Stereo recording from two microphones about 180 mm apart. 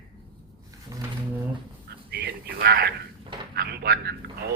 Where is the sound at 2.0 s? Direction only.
60° right (ahead or behind).